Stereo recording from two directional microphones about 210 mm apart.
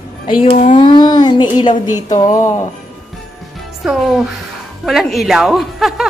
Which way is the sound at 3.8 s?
5° right (ahead or behind).